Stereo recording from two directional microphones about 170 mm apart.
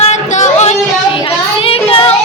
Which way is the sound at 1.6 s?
35° left (ahead or behind).